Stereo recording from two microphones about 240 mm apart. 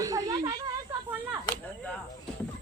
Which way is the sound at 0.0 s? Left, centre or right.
Centre.